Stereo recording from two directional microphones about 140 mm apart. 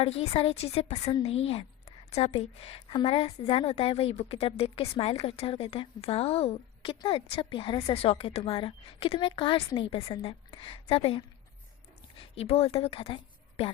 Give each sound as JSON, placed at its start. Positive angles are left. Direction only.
{"t": 0.0, "sound": "a woman's voice", "side_deg": 45}